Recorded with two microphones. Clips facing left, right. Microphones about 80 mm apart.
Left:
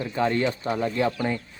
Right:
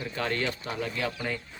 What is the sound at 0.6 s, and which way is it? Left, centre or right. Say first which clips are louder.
Speech: left 7 dB; left.